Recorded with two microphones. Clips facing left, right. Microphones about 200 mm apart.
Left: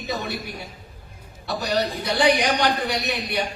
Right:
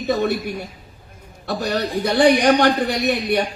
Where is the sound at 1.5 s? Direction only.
50° right (ahead or behind).